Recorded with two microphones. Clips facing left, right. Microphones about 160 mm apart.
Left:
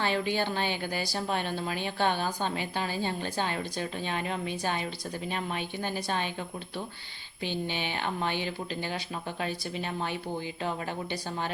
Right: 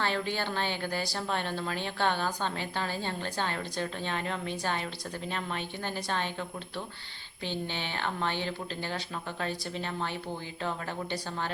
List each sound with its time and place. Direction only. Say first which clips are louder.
0.0 s speech: left 3 dB; 15° left (ahead or behind)
7.4 s speech: left 2 dB; 15° left (ahead or behind)